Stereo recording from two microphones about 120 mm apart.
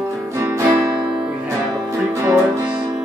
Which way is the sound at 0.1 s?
25° right (ahead or behind).